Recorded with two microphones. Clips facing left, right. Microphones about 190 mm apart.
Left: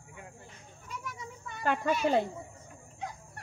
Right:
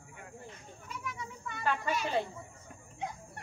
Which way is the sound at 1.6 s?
55° left (ahead or behind).